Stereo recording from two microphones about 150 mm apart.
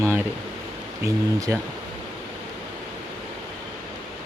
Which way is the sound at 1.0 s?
20° right (ahead or behind).